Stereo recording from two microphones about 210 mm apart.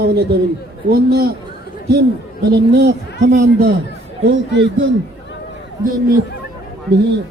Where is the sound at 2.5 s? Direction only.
55° right (ahead or behind).